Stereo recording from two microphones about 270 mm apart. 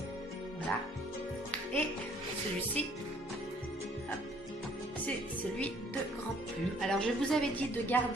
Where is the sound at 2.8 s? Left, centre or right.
Centre.